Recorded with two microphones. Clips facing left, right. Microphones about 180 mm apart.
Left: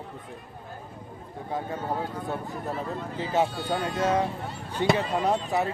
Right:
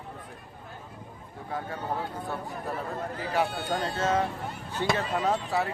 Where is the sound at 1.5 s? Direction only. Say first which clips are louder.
Left 2 dB; 20° left (ahead or behind).